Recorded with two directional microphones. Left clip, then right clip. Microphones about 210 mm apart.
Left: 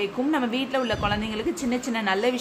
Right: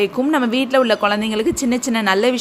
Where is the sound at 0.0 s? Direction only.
30° right (ahead or behind).